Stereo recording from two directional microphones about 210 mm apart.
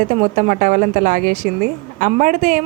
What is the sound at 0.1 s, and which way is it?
A woman's voice, 35° right (ahead or behind).